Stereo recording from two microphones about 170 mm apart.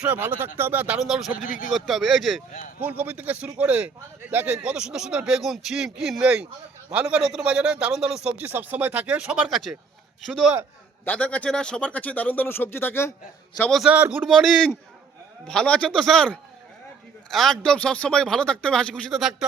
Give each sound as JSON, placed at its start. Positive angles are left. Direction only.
{"t": 0.0, "sound": "speech", "side_deg": -10}
{"t": 1.5, "sound": "speech", "side_deg": 50}
{"t": 1.7, "sound": "a man's voice", "side_deg": 0}
{"t": 11.0, "sound": "speech", "side_deg": 10}
{"t": 13.6, "sound": "a man's voice", "side_deg": 0}